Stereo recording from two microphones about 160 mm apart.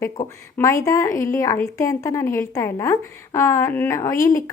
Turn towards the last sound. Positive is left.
turn(degrees=20)  # may be behind; listen again after turning